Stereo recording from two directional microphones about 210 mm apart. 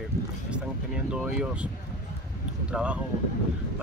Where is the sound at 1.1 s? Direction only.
5° right (ahead or behind).